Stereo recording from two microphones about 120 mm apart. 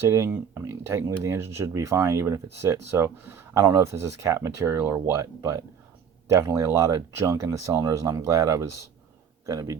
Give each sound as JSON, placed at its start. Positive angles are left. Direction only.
{"t": 0.1, "sound": "speech", "side_deg": -25}